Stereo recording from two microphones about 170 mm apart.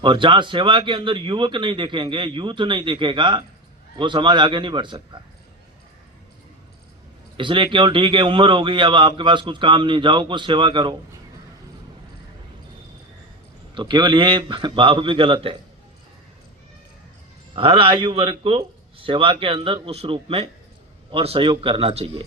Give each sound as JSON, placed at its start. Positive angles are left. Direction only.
{"t": 0.0, "sound": "a man's voice", "side_deg": -30}
{"t": 7.3, "sound": "a man's voice", "side_deg": -30}
{"t": 13.7, "sound": "a man's voice", "side_deg": -30}
{"t": 17.5, "sound": "a man's voice", "side_deg": -30}